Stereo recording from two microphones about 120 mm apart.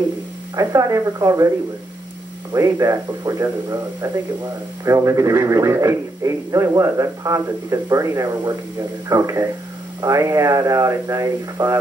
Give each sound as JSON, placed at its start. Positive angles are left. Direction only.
{"t": 0.6, "sound": "speech", "side_deg": -30}
{"t": 2.5, "sound": "speech", "side_deg": -25}